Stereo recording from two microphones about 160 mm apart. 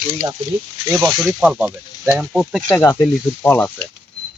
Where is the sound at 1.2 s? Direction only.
5° right (ahead or behind).